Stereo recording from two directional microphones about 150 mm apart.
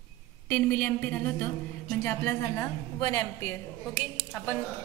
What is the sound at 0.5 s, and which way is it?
A woman's voice, 10° left (ahead or behind).